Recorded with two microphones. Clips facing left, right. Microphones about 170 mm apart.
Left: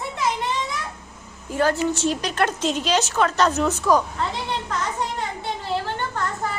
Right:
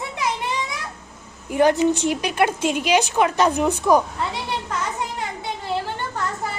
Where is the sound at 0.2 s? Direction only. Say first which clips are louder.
Left 1 dB; 10° right (ahead or behind).